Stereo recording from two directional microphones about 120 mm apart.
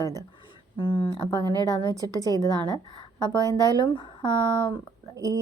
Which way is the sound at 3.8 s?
40° left (ahead or behind).